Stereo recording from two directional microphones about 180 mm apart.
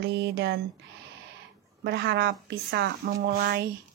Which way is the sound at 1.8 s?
70° right (ahead or behind).